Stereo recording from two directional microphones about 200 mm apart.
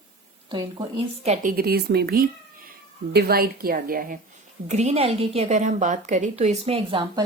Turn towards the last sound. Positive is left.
turn(degrees=-25)  # may be behind; listen again after turning